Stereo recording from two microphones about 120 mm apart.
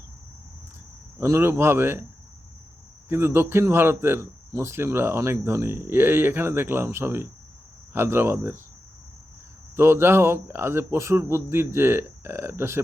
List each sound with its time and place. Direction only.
1.2 s speech: 20° right (ahead or behind)
3.1 s speech: 20° right (ahead or behind)
9.7 s speech: 20° right (ahead or behind)